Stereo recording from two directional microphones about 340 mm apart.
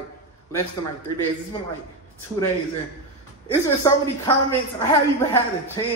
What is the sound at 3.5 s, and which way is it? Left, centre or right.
Speech, centre.